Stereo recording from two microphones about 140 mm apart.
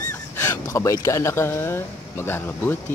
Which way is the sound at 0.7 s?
25° left (ahead or behind).